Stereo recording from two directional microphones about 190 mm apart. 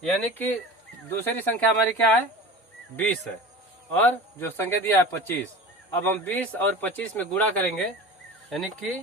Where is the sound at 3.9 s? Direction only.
10° left (ahead or behind).